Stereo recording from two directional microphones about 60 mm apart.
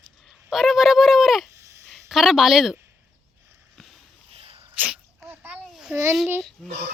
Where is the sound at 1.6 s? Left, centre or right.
Right.